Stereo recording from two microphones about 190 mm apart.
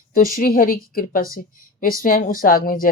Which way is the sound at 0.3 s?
50° left (ahead or behind).